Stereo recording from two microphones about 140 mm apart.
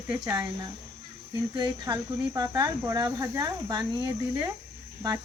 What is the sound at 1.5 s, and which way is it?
Cricket, 30° right (ahead or behind).